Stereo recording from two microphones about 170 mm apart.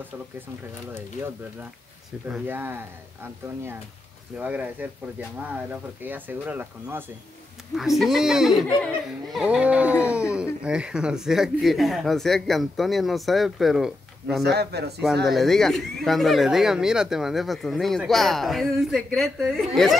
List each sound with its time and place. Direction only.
2.2 s speech: 10° right (ahead or behind)
4.4 s speech: 10° right (ahead or behind)
7.7 s speech: centre (ahead or behind)
14.4 s speech: 70° right (ahead or behind)
15.2 s speech: centre (ahead or behind)